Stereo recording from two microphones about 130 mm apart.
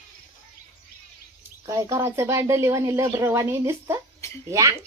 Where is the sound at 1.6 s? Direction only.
25° right (ahead or behind).